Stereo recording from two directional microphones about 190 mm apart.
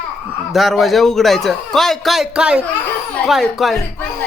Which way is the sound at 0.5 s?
Centre (ahead or behind).